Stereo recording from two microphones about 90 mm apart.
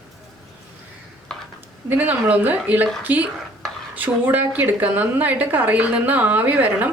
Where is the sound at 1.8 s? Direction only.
20° right (ahead or behind).